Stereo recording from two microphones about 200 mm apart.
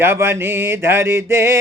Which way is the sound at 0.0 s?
10° right (ahead or behind).